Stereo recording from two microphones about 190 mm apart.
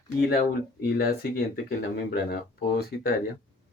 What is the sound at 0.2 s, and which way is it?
Speech, 55° left (ahead or behind).